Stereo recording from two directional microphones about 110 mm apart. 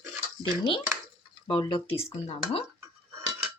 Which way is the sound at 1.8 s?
60° left (ahead or behind).